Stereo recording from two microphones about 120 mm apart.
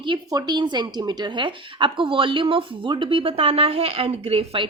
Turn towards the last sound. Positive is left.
turn(degrees=-50)  # may be behind; listen again after turning